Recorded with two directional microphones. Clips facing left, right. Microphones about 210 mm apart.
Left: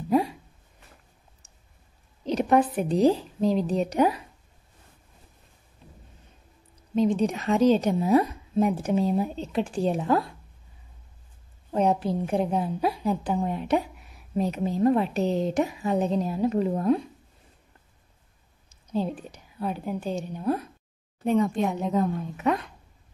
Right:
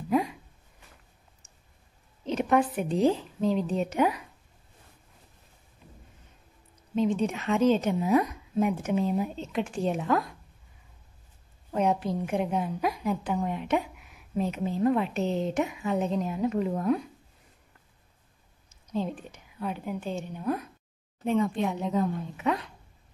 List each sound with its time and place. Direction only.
0.1 s a sound: 35° left (ahead or behind)
2.2 s a woman's voice: 35° left (ahead or behind)
5.8 s a sound: 35° left (ahead or behind)
7.0 s a woman's voice: 35° left (ahead or behind)
11.7 s a woman's voice: 35° left (ahead or behind)
18.9 s a woman's voice: 35° left (ahead or behind)